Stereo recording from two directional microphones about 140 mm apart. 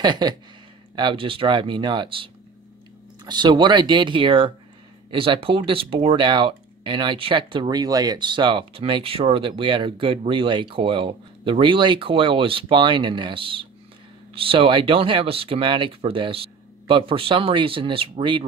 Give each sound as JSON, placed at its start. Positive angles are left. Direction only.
{"t": 0.0, "sound": "speech", "side_deg": -30}